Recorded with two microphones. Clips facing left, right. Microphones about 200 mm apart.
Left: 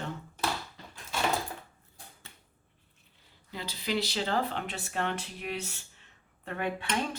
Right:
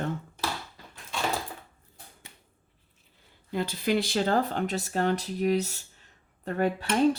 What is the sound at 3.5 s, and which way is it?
Speech, 50° right (ahead or behind).